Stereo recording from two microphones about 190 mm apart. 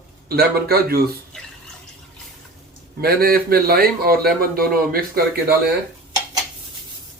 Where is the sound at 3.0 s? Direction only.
55° right (ahead or behind).